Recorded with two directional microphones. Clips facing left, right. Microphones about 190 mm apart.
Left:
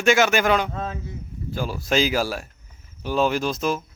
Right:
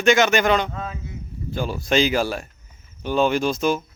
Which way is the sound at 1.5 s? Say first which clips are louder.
Right 2 dB; centre (ahead or behind).